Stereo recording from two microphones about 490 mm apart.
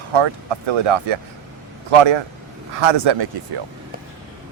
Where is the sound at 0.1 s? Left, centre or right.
Right.